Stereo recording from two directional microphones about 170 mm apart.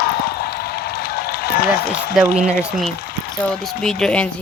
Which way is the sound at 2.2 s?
Centre (ahead or behind).